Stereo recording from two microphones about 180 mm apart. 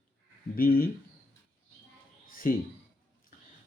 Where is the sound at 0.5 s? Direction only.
55° left (ahead or behind).